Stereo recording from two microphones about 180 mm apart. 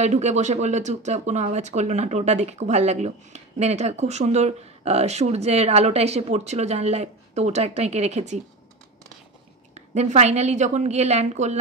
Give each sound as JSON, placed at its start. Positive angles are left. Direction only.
{"t": 0.0, "sound": "speech", "side_deg": -40}
{"t": 9.8, "sound": "speech", "side_deg": -40}